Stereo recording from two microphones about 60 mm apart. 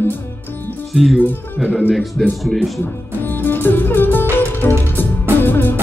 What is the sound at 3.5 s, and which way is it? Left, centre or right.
Music, left.